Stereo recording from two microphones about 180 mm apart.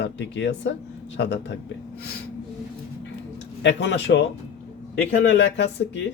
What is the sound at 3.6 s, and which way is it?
Speech, 75° left (ahead or behind).